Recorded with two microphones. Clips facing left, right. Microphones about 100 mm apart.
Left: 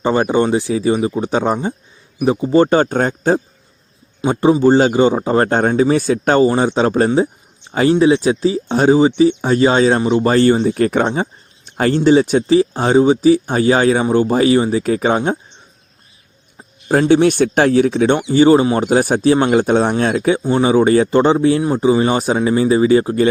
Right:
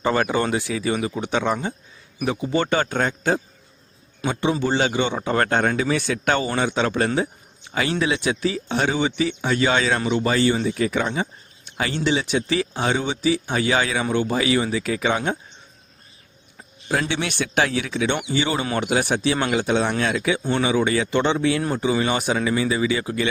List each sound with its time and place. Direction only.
0.0 s speech: 30° left (ahead or behind); by 11.0 s 50° left (ahead or behind)
11.0 s speech: 40° left (ahead or behind)
16.9 s speech: 40° left (ahead or behind)